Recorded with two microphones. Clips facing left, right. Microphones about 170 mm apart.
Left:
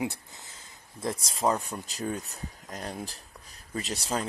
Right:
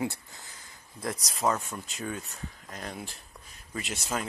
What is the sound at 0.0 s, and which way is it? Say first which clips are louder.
Speech: even; 20° left (ahead or behind).